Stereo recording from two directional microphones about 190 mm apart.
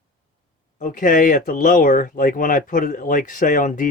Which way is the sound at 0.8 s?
45° left (ahead or behind).